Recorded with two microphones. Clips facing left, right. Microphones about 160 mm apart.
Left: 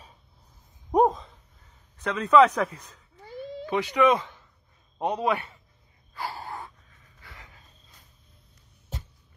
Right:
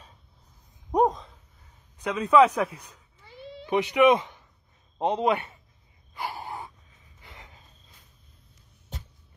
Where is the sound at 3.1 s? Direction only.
40° left (ahead or behind).